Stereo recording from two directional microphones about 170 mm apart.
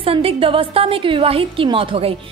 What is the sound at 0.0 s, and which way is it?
A woman's voice, 35° right (ahead or behind).